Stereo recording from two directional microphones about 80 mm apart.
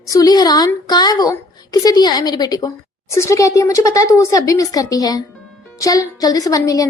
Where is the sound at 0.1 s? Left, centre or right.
Left.